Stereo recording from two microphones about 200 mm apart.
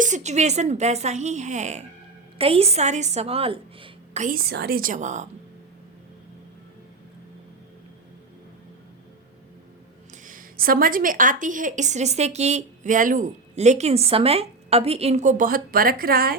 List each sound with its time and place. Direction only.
0.0 s a woman's voice: 35° right (ahead or behind)
4.2 s a woman's voice: 45° right (ahead or behind)
10.2 s a woman's voice: 45° right (ahead or behind)